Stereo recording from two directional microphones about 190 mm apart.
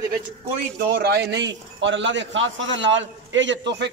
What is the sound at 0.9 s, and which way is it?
A man's voice, 60° right (ahead or behind).